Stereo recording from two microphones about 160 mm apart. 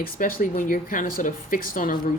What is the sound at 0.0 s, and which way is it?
Speech, 65° left (ahead or behind).